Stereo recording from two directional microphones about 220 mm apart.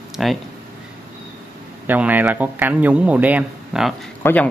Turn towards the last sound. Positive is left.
turn(degrees=5)  # may be behind; listen again after turning